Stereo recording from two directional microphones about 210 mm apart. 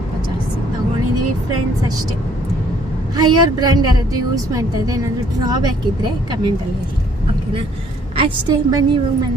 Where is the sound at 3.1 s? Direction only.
20° right (ahead or behind).